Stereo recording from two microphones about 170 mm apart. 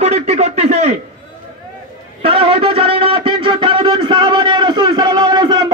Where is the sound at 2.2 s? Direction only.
35° right (ahead or behind).